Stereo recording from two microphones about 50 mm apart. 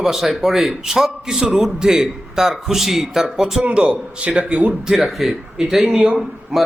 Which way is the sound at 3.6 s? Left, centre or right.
Right.